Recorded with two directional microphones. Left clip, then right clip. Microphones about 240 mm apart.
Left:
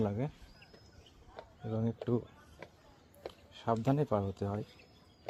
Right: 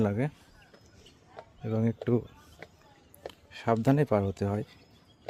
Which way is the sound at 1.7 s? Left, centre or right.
Right.